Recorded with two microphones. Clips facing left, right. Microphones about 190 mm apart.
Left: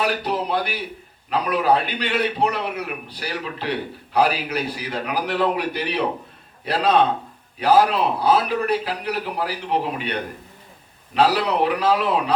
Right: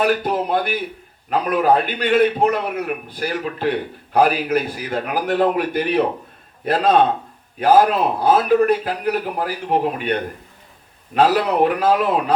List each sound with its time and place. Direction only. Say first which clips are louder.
0.0 s a man's voice: right 4 dB; 50° right (ahead or behind)